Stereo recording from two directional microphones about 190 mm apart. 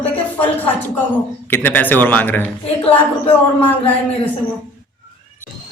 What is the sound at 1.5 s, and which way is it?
A man's voice, 10° left (ahead or behind).